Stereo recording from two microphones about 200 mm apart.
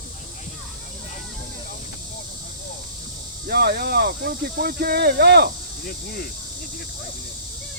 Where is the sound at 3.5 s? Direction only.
50° right (ahead or behind).